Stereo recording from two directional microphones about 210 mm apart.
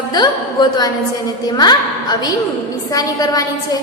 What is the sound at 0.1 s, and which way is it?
A woman's voice, 20° left (ahead or behind).